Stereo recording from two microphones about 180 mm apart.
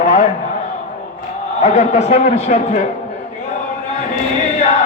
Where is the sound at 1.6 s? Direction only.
40° left (ahead or behind).